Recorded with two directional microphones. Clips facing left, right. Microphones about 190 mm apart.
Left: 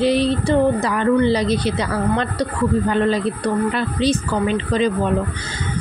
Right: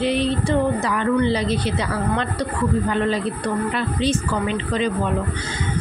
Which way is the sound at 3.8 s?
35° left (ahead or behind).